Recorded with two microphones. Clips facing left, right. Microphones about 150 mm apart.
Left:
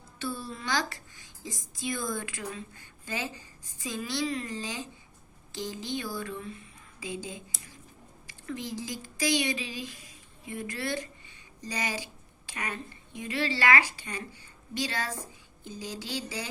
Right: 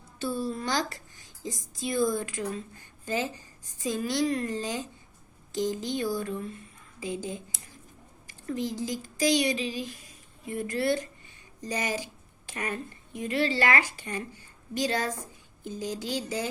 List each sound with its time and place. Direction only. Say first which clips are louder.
0.2 s a sound: right 5 dB; 40° right (ahead or behind)
1.5 s a woman's voice: right 2 dB; 35° right (ahead or behind)
8.4 s a woman's voice: right 5 dB; 40° right (ahead or behind)
15.6 s a woman's voice: right 5 dB; 45° right (ahead or behind)